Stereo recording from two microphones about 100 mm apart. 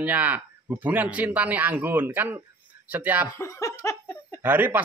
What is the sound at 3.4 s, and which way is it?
Laughter, 35° left (ahead or behind).